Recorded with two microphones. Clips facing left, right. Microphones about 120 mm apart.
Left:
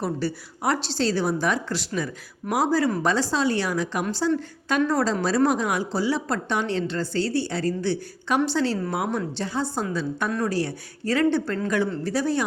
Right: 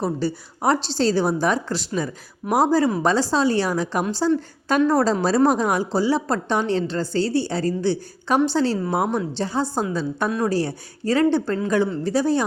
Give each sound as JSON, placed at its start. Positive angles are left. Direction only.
{"t": 0.0, "sound": "a woman's voice", "side_deg": -25}
{"t": 10.2, "sound": "speech", "side_deg": -15}
{"t": 10.5, "sound": "a woman's voice", "side_deg": -30}